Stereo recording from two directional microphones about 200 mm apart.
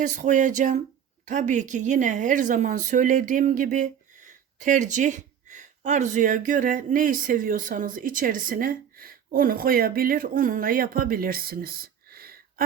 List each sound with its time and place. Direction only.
0.0 s a woman's voice: 40° right (ahead or behind)